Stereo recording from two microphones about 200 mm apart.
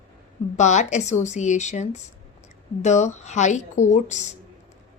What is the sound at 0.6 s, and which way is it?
A woman's voice, 35° left (ahead or behind).